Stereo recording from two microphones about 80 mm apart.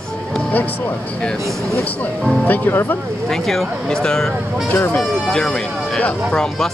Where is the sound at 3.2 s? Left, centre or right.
Centre.